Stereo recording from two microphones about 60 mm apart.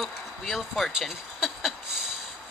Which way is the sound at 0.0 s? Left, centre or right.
Centre.